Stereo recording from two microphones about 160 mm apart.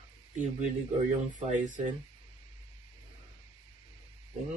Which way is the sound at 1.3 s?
50° right (ahead or behind).